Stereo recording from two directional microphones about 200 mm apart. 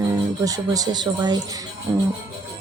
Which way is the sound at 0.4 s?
15° right (ahead or behind).